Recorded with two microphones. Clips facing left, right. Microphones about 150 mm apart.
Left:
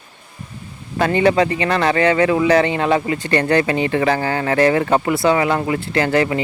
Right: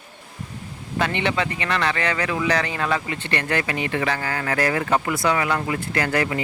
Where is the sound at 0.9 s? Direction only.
40° left (ahead or behind).